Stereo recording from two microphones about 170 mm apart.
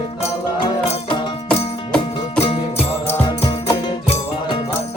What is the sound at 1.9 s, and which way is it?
Music, 35° left (ahead or behind).